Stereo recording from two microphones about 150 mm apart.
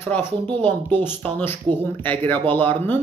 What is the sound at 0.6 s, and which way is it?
Speech, 15° left (ahead or behind).